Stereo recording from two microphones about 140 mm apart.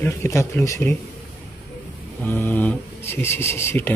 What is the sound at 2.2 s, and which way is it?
Speech, 15° left (ahead or behind).